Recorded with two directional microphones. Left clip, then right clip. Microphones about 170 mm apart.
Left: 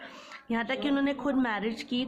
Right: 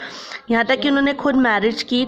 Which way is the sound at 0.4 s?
45° right (ahead or behind).